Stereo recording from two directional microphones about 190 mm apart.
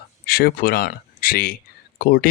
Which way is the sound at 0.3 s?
55° left (ahead or behind).